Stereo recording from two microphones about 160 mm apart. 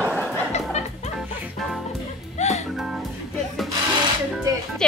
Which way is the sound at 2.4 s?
45° left (ahead or behind).